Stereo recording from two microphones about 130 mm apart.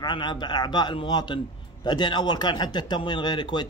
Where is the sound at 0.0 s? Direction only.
35° left (ahead or behind).